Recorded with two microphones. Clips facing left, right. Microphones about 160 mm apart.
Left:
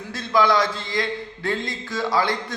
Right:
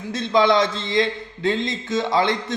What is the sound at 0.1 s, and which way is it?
A man's voice, 20° right (ahead or behind).